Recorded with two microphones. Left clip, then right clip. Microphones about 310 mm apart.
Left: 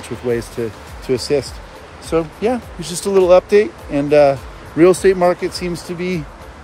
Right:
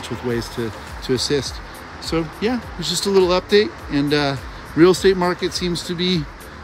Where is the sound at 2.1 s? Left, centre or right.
Centre.